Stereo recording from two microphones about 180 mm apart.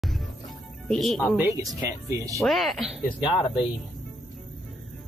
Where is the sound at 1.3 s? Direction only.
15° right (ahead or behind).